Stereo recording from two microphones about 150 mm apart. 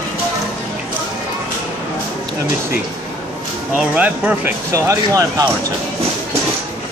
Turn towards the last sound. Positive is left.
turn(degrees=-20)  # may be behind; listen again after turning